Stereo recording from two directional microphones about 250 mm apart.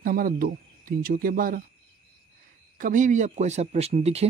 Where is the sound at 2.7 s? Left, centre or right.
Right.